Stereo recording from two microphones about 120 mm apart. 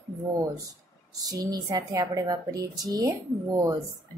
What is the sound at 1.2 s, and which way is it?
A woman's voice, 30° right (ahead or behind).